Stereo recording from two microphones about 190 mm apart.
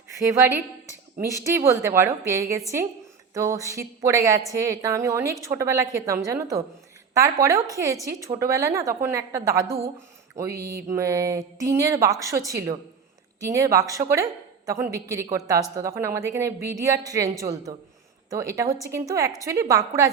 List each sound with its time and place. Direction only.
0.1 s a woman's voice: 15° right (ahead or behind)
10.8 s a woman's voice: 15° right (ahead or behind)